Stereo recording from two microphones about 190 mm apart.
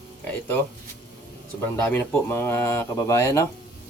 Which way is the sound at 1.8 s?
10° left (ahead or behind).